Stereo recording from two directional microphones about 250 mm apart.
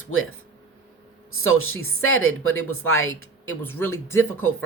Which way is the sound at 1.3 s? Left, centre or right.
Left.